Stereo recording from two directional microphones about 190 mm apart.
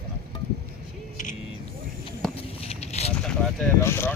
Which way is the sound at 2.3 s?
35° left (ahead or behind).